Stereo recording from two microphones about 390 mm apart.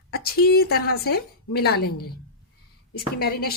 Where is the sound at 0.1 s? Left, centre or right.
Left.